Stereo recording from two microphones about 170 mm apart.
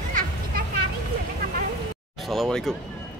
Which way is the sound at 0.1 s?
55° right (ahead or behind).